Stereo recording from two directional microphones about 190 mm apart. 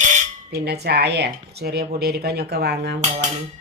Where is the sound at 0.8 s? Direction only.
60° right (ahead or behind).